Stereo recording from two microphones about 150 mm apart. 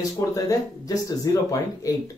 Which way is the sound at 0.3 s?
25° left (ahead or behind).